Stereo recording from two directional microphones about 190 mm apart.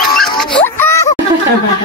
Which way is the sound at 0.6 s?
10° left (ahead or behind).